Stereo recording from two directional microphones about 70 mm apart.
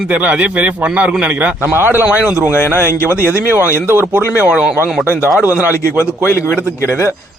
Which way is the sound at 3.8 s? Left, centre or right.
Right.